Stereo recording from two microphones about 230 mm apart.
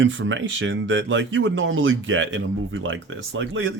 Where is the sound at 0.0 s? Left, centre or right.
Right.